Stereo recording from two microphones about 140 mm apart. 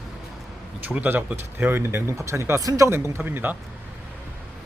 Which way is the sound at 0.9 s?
10° right (ahead or behind).